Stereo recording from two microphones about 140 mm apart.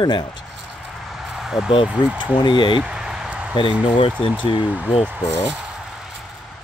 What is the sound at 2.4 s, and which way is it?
Speech, 35° left (ahead or behind).